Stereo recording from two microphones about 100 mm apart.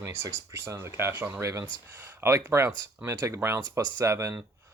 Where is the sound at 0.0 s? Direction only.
25° right (ahead or behind).